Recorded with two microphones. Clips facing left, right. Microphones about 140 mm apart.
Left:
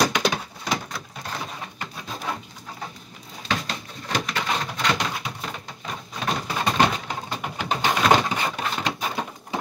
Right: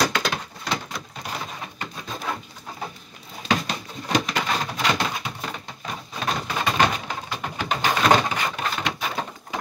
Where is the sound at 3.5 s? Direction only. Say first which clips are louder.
Right 4 dB; 15° right (ahead or behind).